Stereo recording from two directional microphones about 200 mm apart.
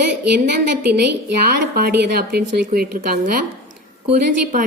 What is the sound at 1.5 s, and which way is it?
A woman's voice, 55° right (ahead or behind).